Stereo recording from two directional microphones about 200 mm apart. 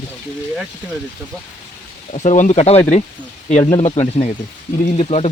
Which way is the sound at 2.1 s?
35° left (ahead or behind).